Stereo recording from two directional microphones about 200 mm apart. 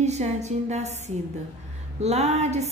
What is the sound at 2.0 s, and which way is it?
Speech, 35° right (ahead or behind).